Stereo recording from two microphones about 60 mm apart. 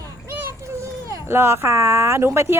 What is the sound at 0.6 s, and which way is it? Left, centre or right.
Children playing, right.